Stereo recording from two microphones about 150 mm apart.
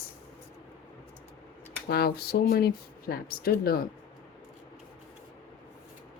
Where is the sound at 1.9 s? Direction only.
90° left.